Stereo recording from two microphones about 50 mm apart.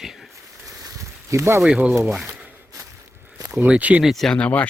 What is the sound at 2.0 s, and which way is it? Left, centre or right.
Speech, right.